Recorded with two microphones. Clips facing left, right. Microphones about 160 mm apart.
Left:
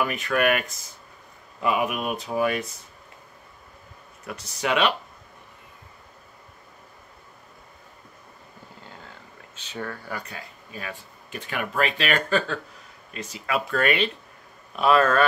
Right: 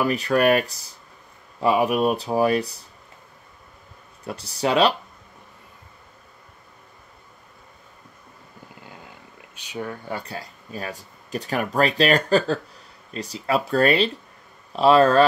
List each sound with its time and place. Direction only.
0.0 s speech: 35° right (ahead or behind)
4.2 s speech: 30° right (ahead or behind)
9.6 s speech: 10° right (ahead or behind)
10.0 s speech: 30° right (ahead or behind)